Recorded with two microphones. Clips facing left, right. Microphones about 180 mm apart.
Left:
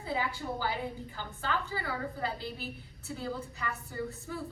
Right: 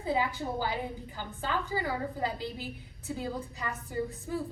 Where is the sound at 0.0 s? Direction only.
20° right (ahead or behind).